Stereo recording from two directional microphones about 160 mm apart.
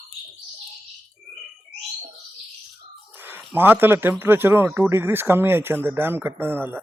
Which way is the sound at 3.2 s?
10° right (ahead or behind).